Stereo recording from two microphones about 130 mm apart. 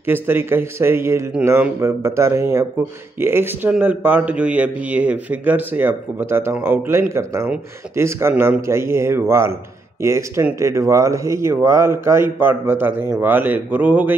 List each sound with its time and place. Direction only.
0.0 s a man's voice: 15° right (ahead or behind)